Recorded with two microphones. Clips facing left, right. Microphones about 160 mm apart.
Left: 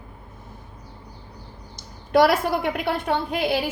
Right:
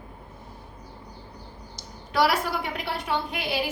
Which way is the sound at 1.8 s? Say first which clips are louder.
Left 6 dB; 50° left (ahead or behind).